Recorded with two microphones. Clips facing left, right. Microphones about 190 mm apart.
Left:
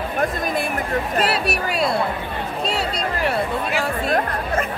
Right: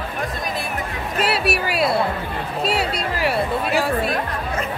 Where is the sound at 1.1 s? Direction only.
Centre (ahead or behind).